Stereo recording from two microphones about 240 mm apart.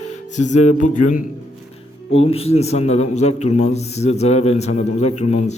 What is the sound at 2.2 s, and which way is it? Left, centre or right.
A man's voice, left.